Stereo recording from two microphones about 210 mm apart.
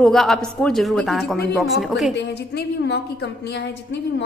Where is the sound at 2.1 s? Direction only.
50° left (ahead or behind).